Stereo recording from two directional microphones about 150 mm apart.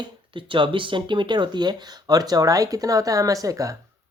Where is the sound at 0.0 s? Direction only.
35° right (ahead or behind).